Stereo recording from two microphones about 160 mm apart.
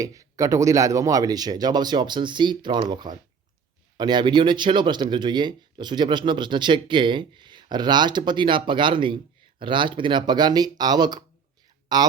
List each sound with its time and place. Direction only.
0.0 s speech: 20° right (ahead or behind)